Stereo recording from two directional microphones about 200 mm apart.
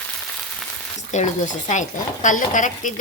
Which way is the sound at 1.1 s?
35° left (ahead or behind).